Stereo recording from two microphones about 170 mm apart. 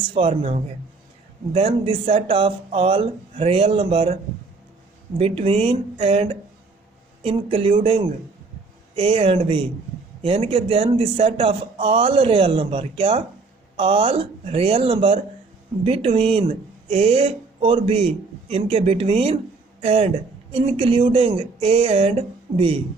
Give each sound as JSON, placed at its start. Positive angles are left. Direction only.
{"t": 0.1, "sound": "speech", "side_deg": -35}
{"t": 5.1, "sound": "speech", "side_deg": -35}